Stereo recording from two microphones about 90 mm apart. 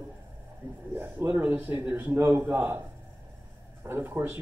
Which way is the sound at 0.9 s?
25° right (ahead or behind).